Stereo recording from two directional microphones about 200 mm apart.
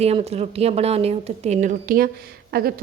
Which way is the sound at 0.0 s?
30° right (ahead or behind).